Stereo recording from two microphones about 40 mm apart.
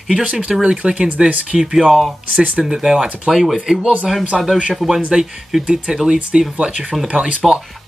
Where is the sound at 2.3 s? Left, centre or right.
Right.